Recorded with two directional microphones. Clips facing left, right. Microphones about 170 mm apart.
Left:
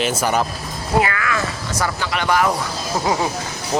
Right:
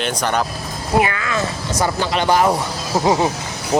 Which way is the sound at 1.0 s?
20° right (ahead or behind).